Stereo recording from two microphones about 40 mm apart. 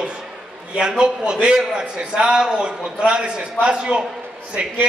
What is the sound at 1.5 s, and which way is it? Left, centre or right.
A man's voice, right.